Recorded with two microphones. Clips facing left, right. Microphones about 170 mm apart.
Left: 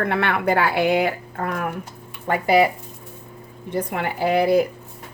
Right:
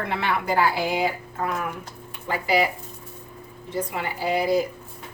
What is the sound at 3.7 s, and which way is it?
Speech, 55° left (ahead or behind).